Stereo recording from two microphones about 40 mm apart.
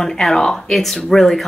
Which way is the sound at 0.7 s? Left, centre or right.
Centre.